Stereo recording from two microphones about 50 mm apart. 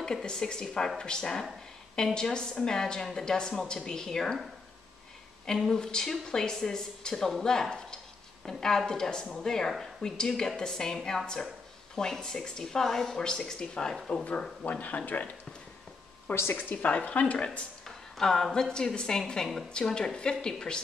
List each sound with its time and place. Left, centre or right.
0.0 s a woman's voice: centre
5.6 s a woman's voice: centre; by 15.2 s left
16.5 s speech: left
17.8 s a woman's voice: centre